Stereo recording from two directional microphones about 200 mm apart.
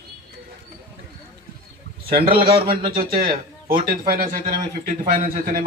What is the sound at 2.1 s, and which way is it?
Speech, 25° right (ahead or behind).